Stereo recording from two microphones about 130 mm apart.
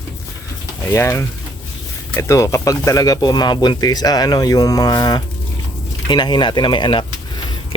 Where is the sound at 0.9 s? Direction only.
20° left (ahead or behind); by 7.0 s 35° left (ahead or behind).